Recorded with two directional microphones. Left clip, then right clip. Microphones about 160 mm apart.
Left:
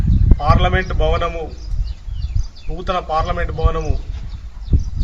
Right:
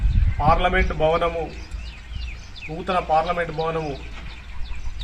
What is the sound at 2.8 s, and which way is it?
A man's voice, 20° left (ahead or behind).